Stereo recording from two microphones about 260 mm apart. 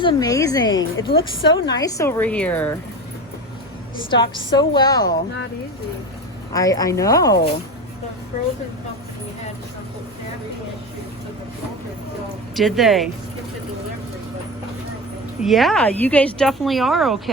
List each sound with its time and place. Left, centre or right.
0.0 s a woman's voice: centre
4.1 s a woman's voice: centre
6.5 s a woman's voice: centre
12.5 s speech: centre
15.4 s speech: centre